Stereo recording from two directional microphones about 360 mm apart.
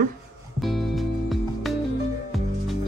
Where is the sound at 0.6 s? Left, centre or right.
Centre.